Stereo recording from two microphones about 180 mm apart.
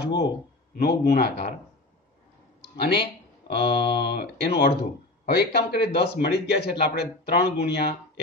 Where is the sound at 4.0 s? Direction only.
65° left (ahead or behind).